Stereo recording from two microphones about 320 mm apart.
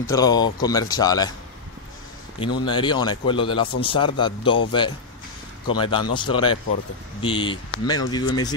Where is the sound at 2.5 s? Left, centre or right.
Centre.